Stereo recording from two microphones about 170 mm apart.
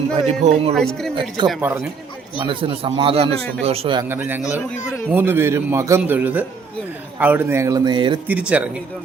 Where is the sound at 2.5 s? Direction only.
30° right (ahead or behind).